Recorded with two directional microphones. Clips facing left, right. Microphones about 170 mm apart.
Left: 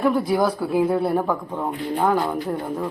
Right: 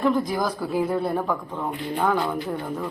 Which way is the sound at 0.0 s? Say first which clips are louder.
Left 3 dB; 5° left (ahead or behind).